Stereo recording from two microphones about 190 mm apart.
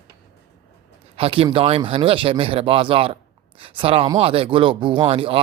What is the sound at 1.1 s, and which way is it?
Speech, 30° right (ahead or behind).